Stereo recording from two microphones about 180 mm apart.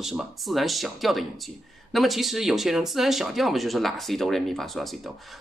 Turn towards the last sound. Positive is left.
turn(degrees=0)  # may be behind; listen again after turning